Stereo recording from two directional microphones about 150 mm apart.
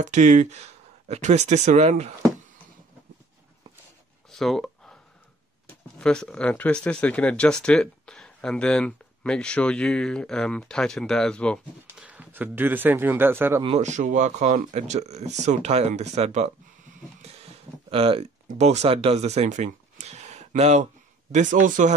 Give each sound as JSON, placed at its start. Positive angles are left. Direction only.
{"t": 0.0, "sound": "speech", "side_deg": -55}
{"t": 4.3, "sound": "a sound", "side_deg": 0}
{"t": 5.9, "sound": "speech", "side_deg": 5}
{"t": 12.0, "sound": "speech", "side_deg": -10}
{"t": 13.7, "sound": "speech", "side_deg": -50}
{"t": 17.8, "sound": "speech", "side_deg": -40}